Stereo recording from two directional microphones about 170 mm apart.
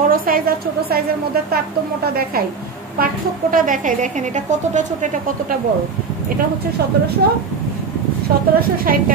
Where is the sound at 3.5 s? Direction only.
50° right (ahead or behind).